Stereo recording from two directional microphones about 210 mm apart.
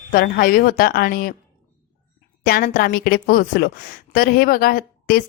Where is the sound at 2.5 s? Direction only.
45° left (ahead or behind).